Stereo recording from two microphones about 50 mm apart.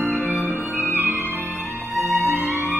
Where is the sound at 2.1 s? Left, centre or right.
Right.